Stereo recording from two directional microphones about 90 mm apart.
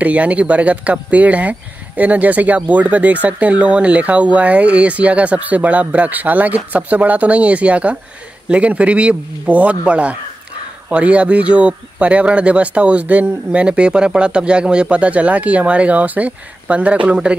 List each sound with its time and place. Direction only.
0.0 s speech: 15° right (ahead or behind)